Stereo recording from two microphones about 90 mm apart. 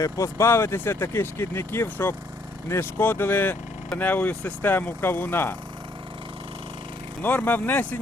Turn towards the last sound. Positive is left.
turn(degrees=20)  # may be behind; listen again after turning